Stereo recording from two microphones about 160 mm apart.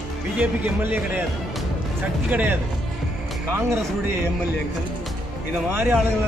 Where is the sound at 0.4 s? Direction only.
10° right (ahead or behind).